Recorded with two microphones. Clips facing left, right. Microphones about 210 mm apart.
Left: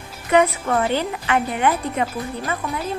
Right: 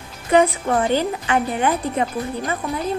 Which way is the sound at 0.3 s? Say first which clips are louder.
Right 1 dB; 30° right (ahead or behind).